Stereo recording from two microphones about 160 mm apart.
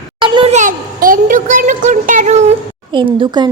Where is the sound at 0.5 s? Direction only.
55° right (ahead or behind).